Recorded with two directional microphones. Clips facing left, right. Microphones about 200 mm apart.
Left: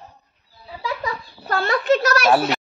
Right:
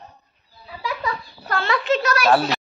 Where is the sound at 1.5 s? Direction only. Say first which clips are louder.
Left 3 dB; 40° left (ahead or behind).